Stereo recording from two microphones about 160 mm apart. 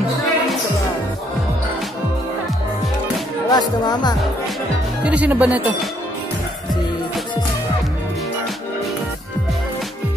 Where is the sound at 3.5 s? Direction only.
25° left (ahead or behind).